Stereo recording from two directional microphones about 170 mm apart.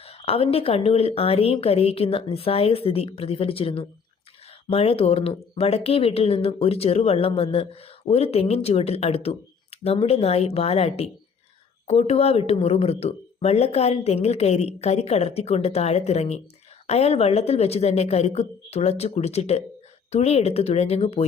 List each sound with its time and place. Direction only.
0.0 s speech: 35° left (ahead or behind)